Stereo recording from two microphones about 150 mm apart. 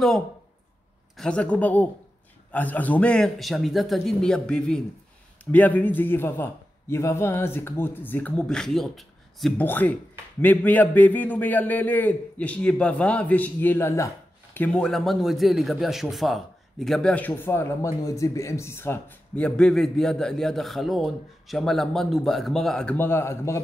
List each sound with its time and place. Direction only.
1.1 s a man's voice: 5° left (ahead or behind)
9.7 s a man's voice: 10° left (ahead or behind)